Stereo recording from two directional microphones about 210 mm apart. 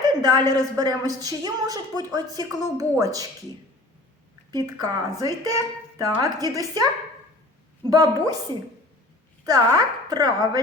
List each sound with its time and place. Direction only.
0.0 s a woman's voice: 20° right (ahead or behind)
4.5 s a woman's voice: 20° right (ahead or behind)
7.9 s a woman's voice: 20° right (ahead or behind)
9.5 s speech: 20° right (ahead or behind)